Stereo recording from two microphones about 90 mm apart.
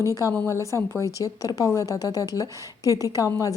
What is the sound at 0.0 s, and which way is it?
A woman's voice, 35° left (ahead or behind).